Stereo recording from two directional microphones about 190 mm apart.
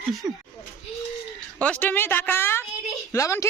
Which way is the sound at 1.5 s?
5° left (ahead or behind).